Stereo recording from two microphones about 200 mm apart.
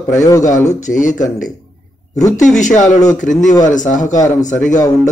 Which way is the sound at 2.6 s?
40° left (ahead or behind).